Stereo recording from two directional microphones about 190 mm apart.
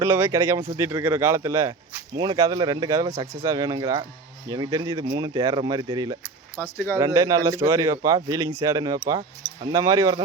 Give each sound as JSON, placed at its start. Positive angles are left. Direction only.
{"t": 0.0, "sound": "speech", "side_deg": -15}
{"t": 6.6, "sound": "speech", "side_deg": 15}
{"t": 6.9, "sound": "speech", "side_deg": -20}